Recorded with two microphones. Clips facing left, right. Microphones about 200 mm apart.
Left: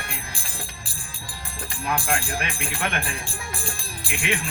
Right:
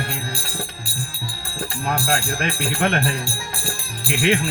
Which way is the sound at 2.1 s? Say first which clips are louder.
Right 4 dB; 40° right (ahead or behind).